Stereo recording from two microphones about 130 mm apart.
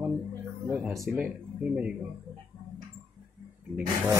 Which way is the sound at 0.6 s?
10° right (ahead or behind).